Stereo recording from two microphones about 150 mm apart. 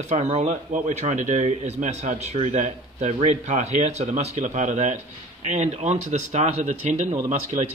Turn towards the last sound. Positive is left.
turn(degrees=-50)  # may be behind; listen again after turning